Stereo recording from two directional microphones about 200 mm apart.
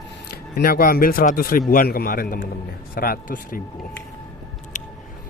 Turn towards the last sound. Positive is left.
turn(degrees=45)  # may be behind; listen again after turning